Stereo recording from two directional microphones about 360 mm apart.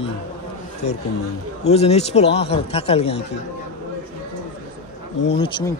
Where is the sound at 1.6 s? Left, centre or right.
Centre.